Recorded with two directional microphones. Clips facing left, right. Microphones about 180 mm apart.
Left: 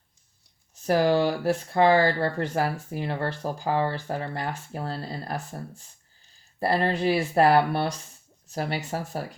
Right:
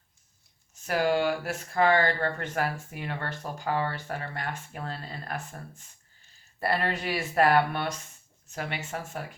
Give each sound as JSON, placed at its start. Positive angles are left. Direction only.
{"t": 0.8, "sound": "speech", "side_deg": 35}